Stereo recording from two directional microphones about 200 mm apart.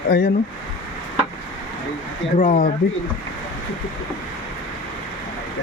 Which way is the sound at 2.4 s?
40° left (ahead or behind).